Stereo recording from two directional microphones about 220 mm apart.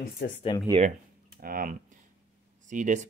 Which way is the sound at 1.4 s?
40° right (ahead or behind).